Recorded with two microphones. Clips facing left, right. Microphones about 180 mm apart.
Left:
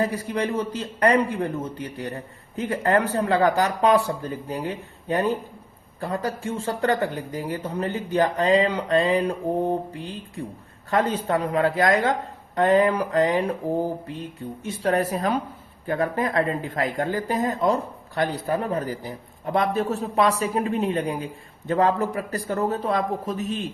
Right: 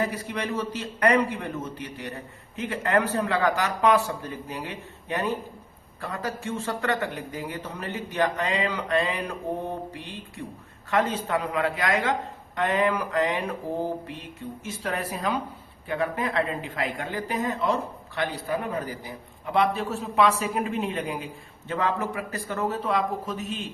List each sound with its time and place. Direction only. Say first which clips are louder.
0.0 s speech: left 4 dB; 35° left (ahead or behind)